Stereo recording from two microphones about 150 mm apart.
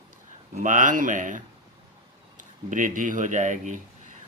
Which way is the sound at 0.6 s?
60° right (ahead or behind).